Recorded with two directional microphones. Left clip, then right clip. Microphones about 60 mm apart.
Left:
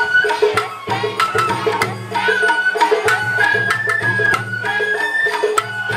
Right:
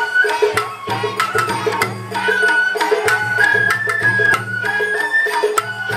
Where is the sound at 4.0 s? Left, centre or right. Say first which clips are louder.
Right 5 dB; right.